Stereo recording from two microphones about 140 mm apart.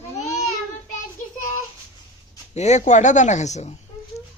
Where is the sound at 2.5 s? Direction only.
55° left (ahead or behind).